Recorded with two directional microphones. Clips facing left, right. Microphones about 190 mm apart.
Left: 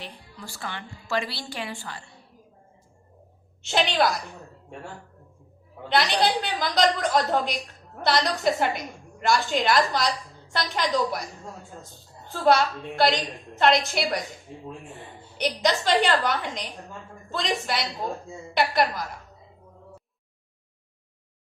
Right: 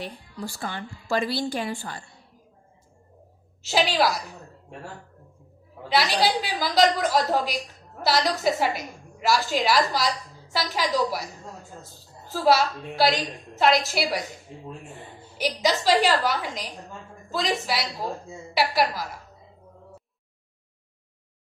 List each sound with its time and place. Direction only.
0.6 s a woman's voice: 40° right (ahead or behind)
3.6 s a woman's voice: 5° right (ahead or behind)
5.9 s a woman's voice: 5° right (ahead or behind)
12.3 s a woman's voice: centre (ahead or behind)
15.4 s a woman's voice: 5° right (ahead or behind)